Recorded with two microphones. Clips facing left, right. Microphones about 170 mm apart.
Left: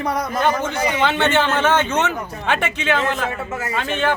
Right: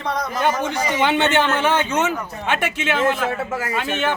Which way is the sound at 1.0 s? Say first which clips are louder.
Right 1 dB; 15° right (ahead or behind).